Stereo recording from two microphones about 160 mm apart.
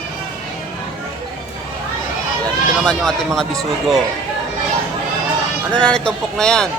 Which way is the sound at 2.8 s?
5° left (ahead or behind).